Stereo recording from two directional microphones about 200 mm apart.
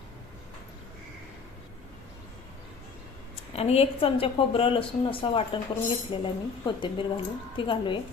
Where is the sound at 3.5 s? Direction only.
30° left (ahead or behind).